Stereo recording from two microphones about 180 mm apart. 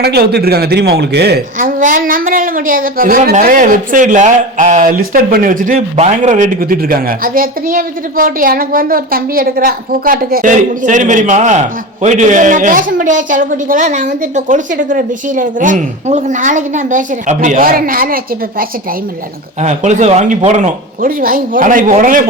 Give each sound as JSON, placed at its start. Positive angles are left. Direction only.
{"t": 0.0, "sound": "a man's voice", "side_deg": -60}
{"t": 19.6, "sound": "a man's voice", "side_deg": -40}